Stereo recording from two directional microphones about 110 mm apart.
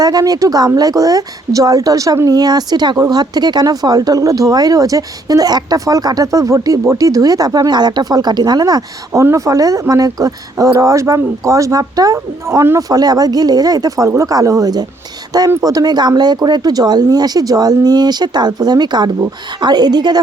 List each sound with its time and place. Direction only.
0.0 s a woman's voice: 35° right (ahead or behind)